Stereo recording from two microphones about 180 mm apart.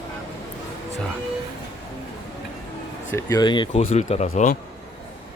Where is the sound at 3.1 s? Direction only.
20° left (ahead or behind); by 4.5 s 40° left (ahead or behind).